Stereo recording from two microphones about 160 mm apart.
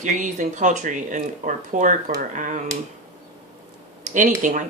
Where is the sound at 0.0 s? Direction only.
50° right (ahead or behind).